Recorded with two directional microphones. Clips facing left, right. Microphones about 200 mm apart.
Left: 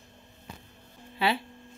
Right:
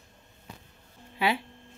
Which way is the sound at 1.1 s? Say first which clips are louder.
Even; 15° right (ahead or behind).